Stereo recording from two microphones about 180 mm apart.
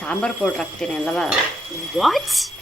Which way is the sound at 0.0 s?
5° left (ahead or behind).